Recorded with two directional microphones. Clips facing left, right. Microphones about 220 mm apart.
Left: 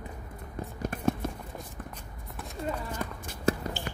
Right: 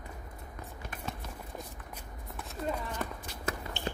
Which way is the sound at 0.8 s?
45° left (ahead or behind).